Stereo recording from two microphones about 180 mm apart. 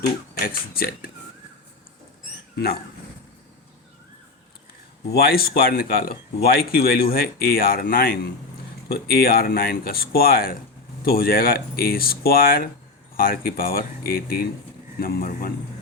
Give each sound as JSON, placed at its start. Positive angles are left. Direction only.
{"t": 0.8, "sound": "speech", "side_deg": 55}
{"t": 5.1, "sound": "speech", "side_deg": 55}